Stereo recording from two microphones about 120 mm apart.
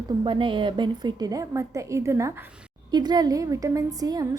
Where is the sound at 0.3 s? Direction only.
45° right (ahead or behind); by 2.3 s 25° right (ahead or behind).